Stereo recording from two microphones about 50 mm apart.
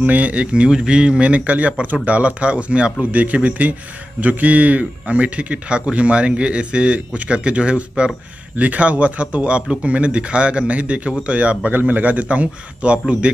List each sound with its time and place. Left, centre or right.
0.0 s speech: right